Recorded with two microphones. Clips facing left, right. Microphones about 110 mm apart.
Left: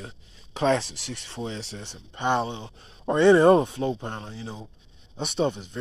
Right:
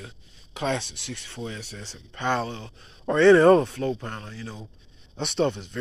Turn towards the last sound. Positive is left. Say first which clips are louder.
# right 1 dB
turn(degrees=10)  # may be behind; listen again after turning